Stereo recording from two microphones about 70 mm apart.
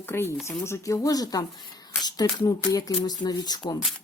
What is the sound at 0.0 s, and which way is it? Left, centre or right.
Speech, left.